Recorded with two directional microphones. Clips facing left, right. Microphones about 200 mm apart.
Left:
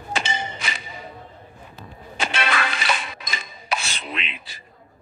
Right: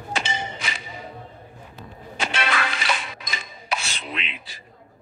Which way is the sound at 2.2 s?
60° left (ahead or behind).